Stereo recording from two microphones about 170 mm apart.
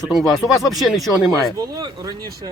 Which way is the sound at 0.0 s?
Centre (ahead or behind).